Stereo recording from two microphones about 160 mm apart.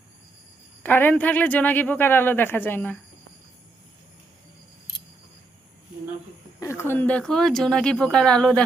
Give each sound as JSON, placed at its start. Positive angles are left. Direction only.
{"t": 0.8, "sound": "a woman's voice", "side_deg": 10}
{"t": 6.6, "sound": "speech", "side_deg": 15}